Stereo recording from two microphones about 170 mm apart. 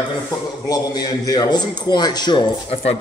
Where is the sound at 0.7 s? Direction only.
25° left (ahead or behind).